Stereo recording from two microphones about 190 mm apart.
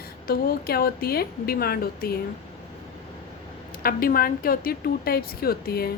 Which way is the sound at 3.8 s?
50° left (ahead or behind).